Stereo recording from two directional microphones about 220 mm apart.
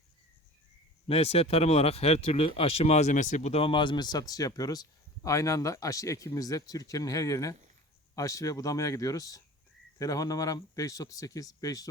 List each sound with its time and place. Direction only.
1.0 s speech: 25° left (ahead or behind)